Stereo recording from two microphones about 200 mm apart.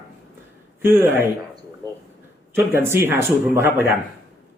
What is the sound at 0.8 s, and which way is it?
Speech, 10° right (ahead or behind).